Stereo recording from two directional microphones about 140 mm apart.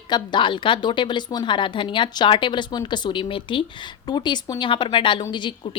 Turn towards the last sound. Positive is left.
turn(degrees=35)  # may be behind; listen again after turning